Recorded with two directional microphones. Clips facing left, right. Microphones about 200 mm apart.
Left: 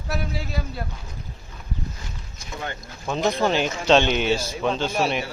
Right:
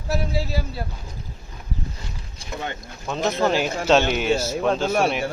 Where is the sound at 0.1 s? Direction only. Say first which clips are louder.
Right 4 dB; 30° right (ahead or behind).